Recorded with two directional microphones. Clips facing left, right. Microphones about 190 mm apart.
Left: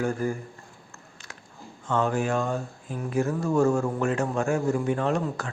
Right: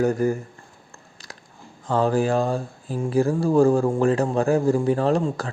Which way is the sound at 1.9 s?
35° right (ahead or behind).